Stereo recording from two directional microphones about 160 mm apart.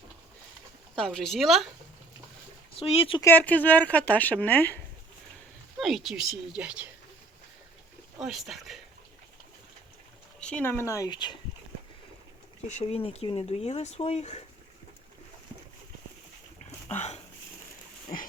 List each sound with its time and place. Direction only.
0.9 s speech: 5° left (ahead or behind)
2.7 s speech: 40° left (ahead or behind)
3.2 s speech: 10° left (ahead or behind)
5.8 s speech: centre (ahead or behind)
8.2 s speech: centre (ahead or behind)
10.4 s speech: 10° left (ahead or behind); by 11.3 s 30° left (ahead or behind)
12.6 s speech: 45° left (ahead or behind)